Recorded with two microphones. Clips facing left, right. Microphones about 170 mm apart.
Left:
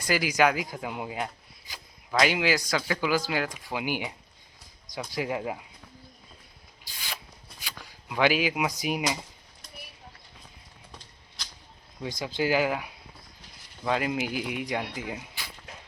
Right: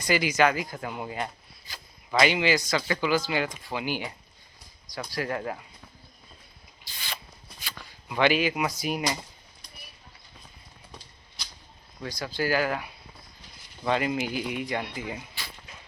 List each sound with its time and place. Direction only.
0.0 s speech: 5° left (ahead or behind)
5.1 s speech: 10° left (ahead or behind)
7.6 s a sound: 10° left (ahead or behind)
8.7 s speech: 10° left (ahead or behind)
12.0 s speech: 20° left (ahead or behind); by 15.2 s centre (ahead or behind)